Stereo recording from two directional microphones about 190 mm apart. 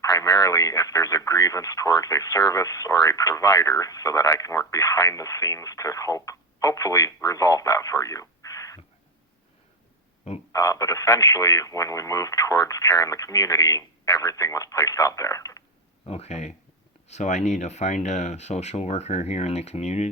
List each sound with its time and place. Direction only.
0.0 s speech: 20° left (ahead or behind)
10.5 s speech: 15° left (ahead or behind)
16.0 s speech: 35° left (ahead or behind)